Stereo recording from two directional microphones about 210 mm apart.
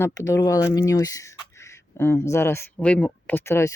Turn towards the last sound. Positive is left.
turn(degrees=10)  # may be behind; listen again after turning